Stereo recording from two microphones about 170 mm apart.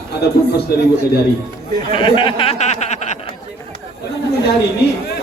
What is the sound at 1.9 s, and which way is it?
Speech, 30° left (ahead or behind).